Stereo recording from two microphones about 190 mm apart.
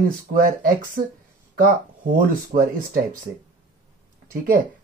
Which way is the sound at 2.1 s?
50° right (ahead or behind).